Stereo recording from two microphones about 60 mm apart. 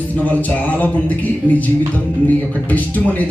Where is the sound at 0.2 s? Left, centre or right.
Left.